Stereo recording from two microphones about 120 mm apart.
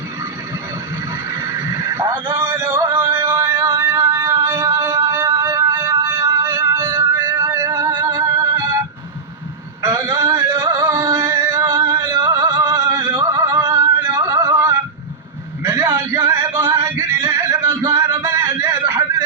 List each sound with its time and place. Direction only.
1.3 s neigh: 25° right (ahead or behind)
2.3 s music: 20° right (ahead or behind)
3.2 s music: 30° right (ahead or behind)
4.9 s music: 35° right (ahead or behind)
6.4 s music: 20° right (ahead or behind)
9.8 s music: 25° right (ahead or behind)
15.6 s a sound: 25° right (ahead or behind)